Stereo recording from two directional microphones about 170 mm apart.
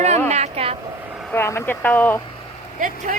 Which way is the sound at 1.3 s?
15° left (ahead or behind).